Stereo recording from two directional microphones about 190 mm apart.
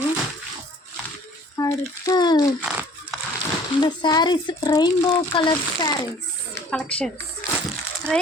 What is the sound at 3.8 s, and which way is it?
Speech, 25° left (ahead or behind).